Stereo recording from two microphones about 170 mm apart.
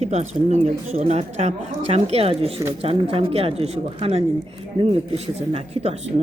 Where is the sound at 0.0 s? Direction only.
40° right (ahead or behind).